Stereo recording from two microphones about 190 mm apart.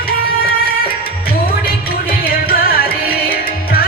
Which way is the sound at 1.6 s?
50° left (ahead or behind).